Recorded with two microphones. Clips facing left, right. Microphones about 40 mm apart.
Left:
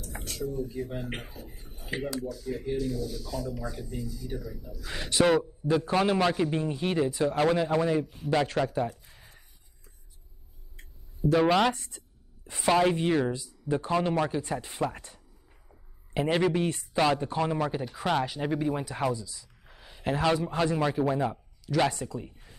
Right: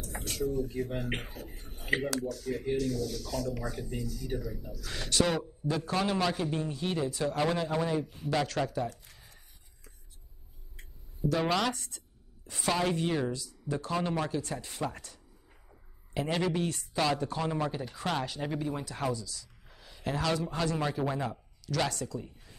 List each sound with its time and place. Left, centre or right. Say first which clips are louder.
0.1 s speech: right 2 dB; right
2.0 s speech: even; right
3.6 s speech: even; right
4.0 s speech: even; right
4.8 s a man's voice: left 5 dB; left
9.1 s a sound: left 2 dB; left
11.3 s a man's voice: left 7 dB; centre